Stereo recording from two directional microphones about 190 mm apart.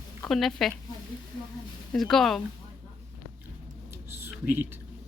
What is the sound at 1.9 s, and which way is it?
Speech, centre (ahead or behind).